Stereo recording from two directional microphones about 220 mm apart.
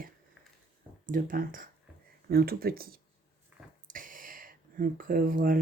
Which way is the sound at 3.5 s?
10° right (ahead or behind).